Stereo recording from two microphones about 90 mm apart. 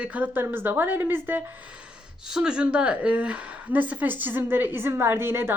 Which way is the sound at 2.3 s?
10° right (ahead or behind).